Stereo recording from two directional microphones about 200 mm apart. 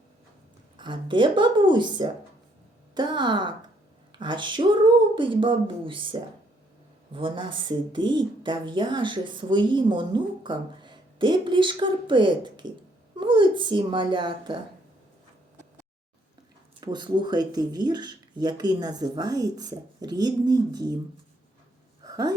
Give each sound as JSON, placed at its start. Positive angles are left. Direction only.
{"t": 0.8, "sound": "speech", "side_deg": -25}
{"t": 16.8, "sound": "speech", "side_deg": -20}
{"t": 22.0, "sound": "a sound", "side_deg": -20}